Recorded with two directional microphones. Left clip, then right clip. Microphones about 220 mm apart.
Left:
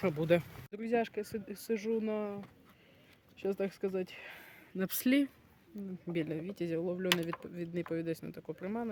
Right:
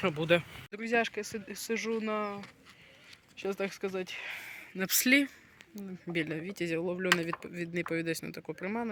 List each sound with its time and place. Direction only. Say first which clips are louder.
0.0 s speech: right 2 dB; centre (ahead or behind)